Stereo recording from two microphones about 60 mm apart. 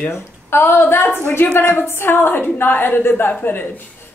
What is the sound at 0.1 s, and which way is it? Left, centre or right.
A woman's voice, left.